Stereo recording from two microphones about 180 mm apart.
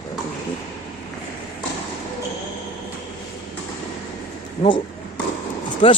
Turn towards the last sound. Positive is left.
turn(degrees=35)  # may be behind; listen again after turning